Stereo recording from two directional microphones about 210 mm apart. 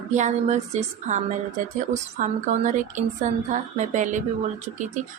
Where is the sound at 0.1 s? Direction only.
35° right (ahead or behind).